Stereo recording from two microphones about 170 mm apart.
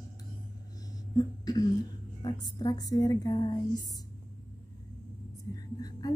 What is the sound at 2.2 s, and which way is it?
A woman's voice, 25° left (ahead or behind).